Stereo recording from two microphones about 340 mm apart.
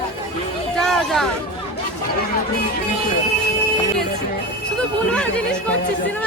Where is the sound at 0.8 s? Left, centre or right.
Centre.